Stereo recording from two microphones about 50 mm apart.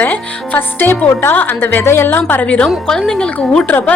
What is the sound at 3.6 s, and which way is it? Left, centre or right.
Speech, left.